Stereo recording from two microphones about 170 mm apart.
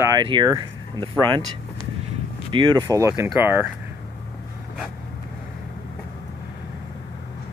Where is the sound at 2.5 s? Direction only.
25° right (ahead or behind).